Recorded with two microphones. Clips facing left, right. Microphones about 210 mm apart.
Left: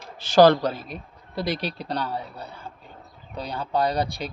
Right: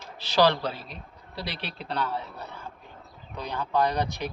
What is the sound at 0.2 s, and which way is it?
A man's voice, 50° left (ahead or behind).